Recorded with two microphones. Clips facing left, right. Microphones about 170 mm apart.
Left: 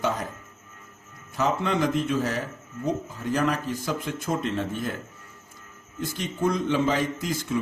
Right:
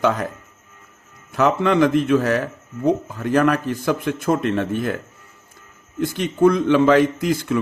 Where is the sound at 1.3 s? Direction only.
70° right (ahead or behind).